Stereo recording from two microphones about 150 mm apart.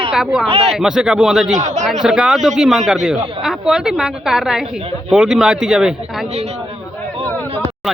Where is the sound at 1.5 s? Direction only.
55° right (ahead or behind).